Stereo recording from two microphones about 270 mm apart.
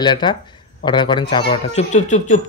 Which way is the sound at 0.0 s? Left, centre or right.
Centre.